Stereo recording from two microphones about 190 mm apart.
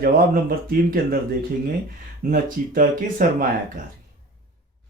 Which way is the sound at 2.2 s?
45° right (ahead or behind).